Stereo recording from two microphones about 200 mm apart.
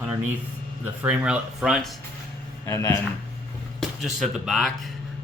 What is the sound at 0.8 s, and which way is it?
Speech, 10° right (ahead or behind).